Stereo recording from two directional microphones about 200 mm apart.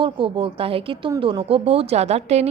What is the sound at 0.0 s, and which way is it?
Speech, 25° right (ahead or behind).